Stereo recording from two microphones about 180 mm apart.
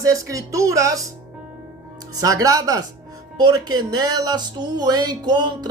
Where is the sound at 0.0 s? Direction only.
20° right (ahead or behind).